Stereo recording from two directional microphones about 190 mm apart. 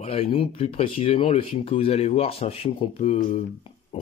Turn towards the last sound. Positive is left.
turn(degrees=30)  # may be behind; listen again after turning